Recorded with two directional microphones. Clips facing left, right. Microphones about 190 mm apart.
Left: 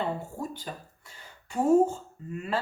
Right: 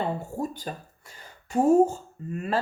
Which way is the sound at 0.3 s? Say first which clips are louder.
Right 5 dB; 40° right (ahead or behind).